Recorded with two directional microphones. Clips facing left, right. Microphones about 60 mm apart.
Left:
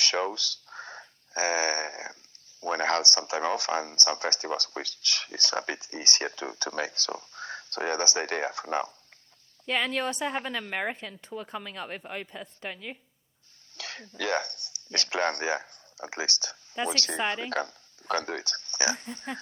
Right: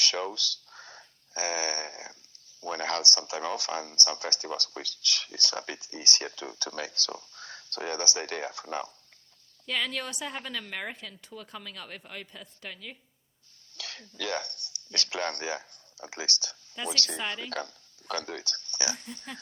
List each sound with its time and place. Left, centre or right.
0.0 s a woman's voice: left